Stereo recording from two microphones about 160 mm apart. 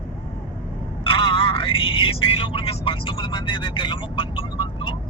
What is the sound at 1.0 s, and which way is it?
Speech, 30° left (ahead or behind).